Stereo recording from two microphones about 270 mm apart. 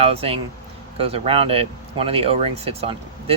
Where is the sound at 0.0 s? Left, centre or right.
Right.